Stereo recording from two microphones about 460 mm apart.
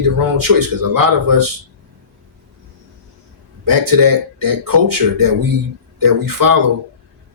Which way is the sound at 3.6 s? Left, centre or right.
Right.